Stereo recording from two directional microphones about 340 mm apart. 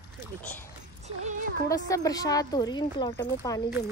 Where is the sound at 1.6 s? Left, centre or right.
Centre.